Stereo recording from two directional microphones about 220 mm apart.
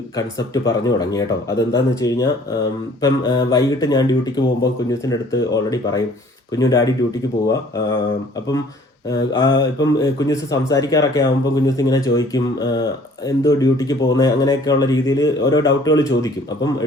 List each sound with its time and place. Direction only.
0.2 s speech: 15° left (ahead or behind)
9.0 s speech: 15° left (ahead or behind)